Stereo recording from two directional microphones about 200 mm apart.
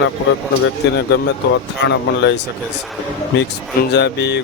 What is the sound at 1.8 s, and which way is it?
Speech, 60° left (ahead or behind).